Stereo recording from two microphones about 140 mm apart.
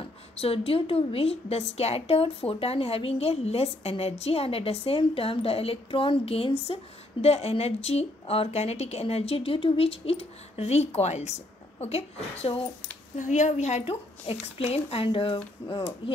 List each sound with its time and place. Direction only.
0.0 s a woman's voice: 45° left (ahead or behind)
13.1 s a woman's voice: 60° left (ahead or behind); by 15.8 s 40° left (ahead or behind)